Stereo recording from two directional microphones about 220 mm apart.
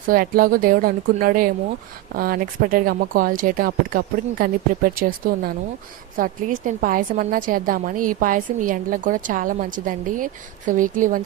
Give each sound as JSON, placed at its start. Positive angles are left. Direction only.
{"t": 0.1, "sound": "a woman's voice", "side_deg": -40}